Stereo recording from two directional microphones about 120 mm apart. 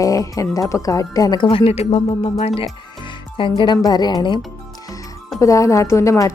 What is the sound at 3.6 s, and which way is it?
Speech, 35° left (ahead or behind).